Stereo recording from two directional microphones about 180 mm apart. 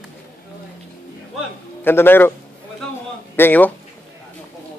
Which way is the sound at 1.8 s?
10° left (ahead or behind).